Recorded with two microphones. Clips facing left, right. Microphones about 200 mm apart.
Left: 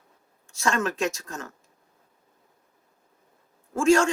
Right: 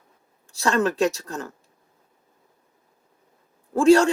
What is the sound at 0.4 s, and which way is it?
A man's voice, 35° right (ahead or behind).